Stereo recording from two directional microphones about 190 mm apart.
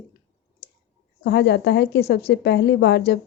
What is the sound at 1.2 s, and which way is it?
A woman's voice, 65° left (ahead or behind).